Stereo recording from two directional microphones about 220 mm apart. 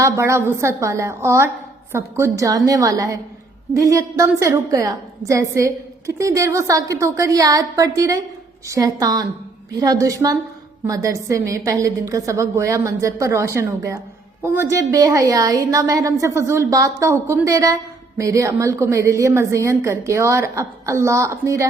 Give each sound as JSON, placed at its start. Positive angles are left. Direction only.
{"t": 0.0, "sound": "a woman's voice", "side_deg": -15}